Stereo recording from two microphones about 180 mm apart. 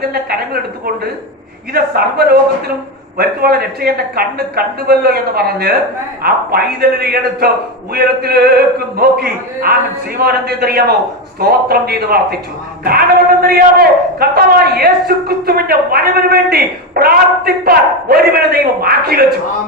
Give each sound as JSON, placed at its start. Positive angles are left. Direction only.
{"t": 0.1, "sound": "a man's voice", "side_deg": -60}
{"t": 1.7, "sound": "a man's voice", "side_deg": -60}
{"t": 13.4, "sound": "a man's voice", "side_deg": -55}